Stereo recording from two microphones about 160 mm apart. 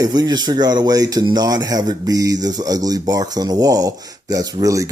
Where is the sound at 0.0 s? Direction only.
25° right (ahead or behind).